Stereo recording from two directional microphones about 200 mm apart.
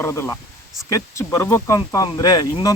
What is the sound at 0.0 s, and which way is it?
Speech, 15° left (ahead or behind).